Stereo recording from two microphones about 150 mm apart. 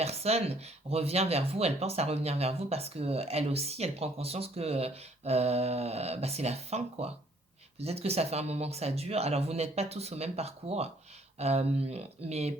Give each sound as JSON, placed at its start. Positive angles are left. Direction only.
{"t": 0.0, "sound": "speech", "side_deg": -45}